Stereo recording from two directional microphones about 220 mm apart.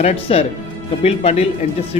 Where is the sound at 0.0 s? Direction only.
30° left (ahead or behind).